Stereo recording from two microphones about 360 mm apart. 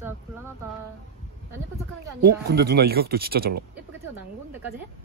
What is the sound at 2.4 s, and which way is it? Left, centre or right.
Speech, right.